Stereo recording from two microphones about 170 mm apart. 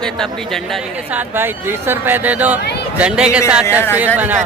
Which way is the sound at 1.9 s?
10° right (ahead or behind).